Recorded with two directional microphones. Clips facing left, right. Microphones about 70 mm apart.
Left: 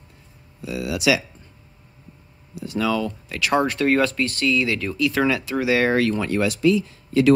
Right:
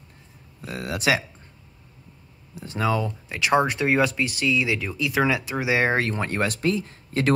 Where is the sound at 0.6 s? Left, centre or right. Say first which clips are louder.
Left 4 dB; right.